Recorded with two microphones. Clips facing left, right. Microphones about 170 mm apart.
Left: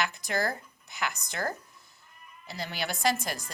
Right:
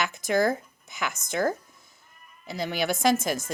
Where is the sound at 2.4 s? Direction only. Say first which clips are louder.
Right 7 dB; 50° right (ahead or behind).